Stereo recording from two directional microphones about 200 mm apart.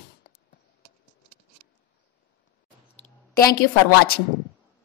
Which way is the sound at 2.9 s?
40° left (ahead or behind).